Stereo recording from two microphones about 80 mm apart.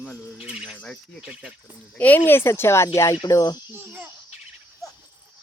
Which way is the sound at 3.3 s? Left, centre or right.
Left.